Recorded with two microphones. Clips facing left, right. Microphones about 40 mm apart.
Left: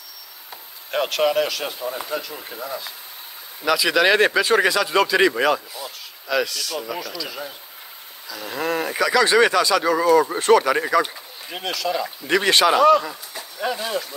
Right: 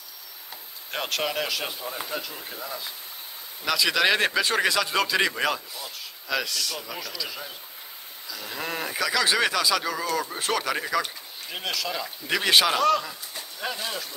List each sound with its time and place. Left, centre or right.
0.9 s speech: centre
1.8 s speech: centre
3.6 s speech: centre